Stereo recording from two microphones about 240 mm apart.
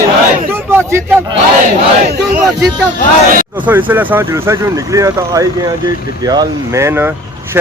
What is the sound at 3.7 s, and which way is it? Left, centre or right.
Speech, centre.